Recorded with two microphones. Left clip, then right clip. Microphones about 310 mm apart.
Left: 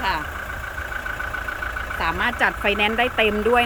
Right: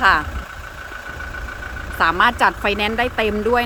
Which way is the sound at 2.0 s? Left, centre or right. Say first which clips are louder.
Right 7 dB; centre.